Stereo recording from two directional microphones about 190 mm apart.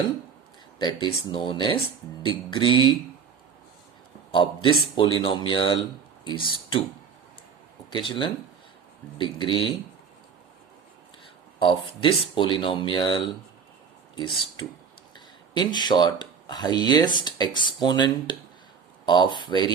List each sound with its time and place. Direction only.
0.8 s speech: 25° left (ahead or behind)
4.3 s speech: 25° left (ahead or behind)
7.9 s speech: 25° left (ahead or behind)
11.6 s speech: 25° left (ahead or behind)
15.1 s speech: 25° left (ahead or behind)